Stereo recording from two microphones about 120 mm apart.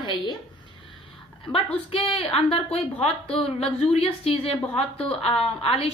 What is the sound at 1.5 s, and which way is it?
A woman's voice, 50° left (ahead or behind).